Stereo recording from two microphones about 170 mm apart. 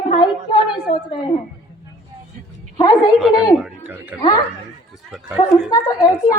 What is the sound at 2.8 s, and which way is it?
Speech, 25° left (ahead or behind).